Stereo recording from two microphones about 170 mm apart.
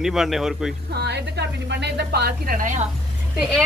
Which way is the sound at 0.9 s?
80° right.